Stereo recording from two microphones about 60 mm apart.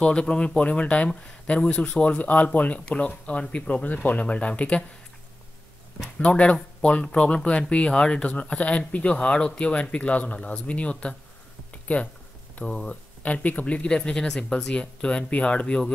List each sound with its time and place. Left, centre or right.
0.0 s speech: centre
6.1 s speech: centre
11.7 s a sound: left
12.6 s speech: centre